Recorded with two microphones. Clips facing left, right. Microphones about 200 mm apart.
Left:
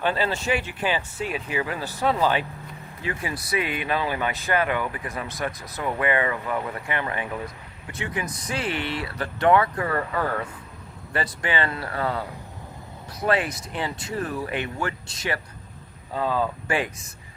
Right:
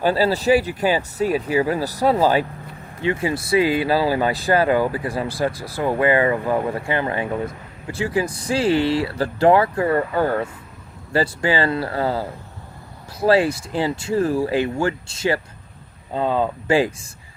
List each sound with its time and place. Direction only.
0.0 s speech: 35° right (ahead or behind)
3.0 s speech: 25° right (ahead or behind)